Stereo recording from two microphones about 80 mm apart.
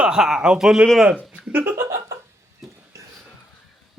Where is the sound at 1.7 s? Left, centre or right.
Right.